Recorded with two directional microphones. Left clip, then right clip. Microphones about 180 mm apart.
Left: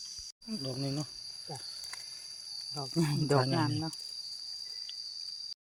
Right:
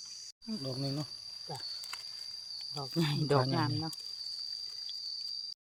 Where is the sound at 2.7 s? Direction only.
25° left (ahead or behind).